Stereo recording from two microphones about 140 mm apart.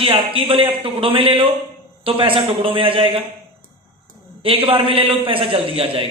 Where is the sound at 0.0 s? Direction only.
40° right (ahead or behind).